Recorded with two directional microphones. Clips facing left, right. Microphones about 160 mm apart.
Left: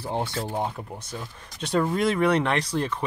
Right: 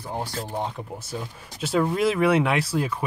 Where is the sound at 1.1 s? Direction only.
5° right (ahead or behind).